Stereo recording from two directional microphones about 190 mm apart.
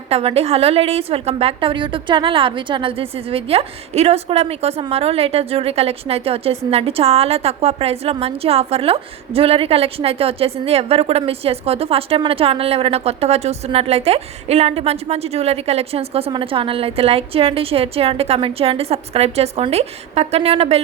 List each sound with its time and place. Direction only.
0.1 s a woman's voice: 30° right (ahead or behind)